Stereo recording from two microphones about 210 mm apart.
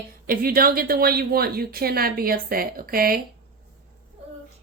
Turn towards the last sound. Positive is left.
turn(degrees=-45)  # may be behind; listen again after turning